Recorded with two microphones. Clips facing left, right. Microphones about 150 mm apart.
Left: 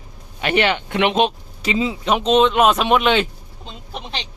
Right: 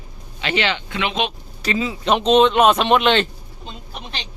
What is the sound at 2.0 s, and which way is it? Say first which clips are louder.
Speech: right 2 dB; 5° left (ahead or behind).